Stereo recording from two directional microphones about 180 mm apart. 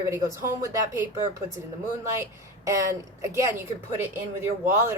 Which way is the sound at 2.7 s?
15° right (ahead or behind).